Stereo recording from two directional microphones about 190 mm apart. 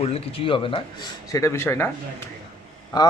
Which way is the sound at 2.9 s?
20° left (ahead or behind).